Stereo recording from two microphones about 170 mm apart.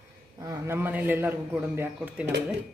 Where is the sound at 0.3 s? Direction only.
20° right (ahead or behind).